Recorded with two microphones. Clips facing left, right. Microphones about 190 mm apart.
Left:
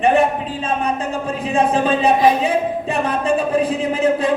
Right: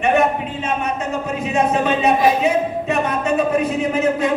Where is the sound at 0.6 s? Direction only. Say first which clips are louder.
Left 2 dB; 30° left (ahead or behind).